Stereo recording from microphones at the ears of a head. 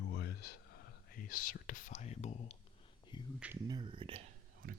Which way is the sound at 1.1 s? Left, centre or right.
Left.